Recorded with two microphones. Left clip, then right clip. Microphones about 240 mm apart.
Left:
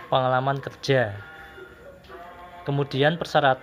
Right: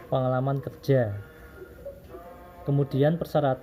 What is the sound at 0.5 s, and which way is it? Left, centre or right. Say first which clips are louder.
Speech: left 3 dB; centre.